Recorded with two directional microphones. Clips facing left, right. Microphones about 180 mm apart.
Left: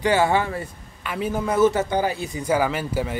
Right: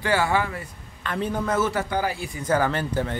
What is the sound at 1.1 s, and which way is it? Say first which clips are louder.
Speech: left 1 dB; 10° left (ahead or behind).